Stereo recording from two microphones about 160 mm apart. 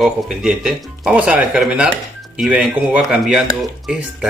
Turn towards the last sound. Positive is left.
turn(degrees=-5)  # may be behind; listen again after turning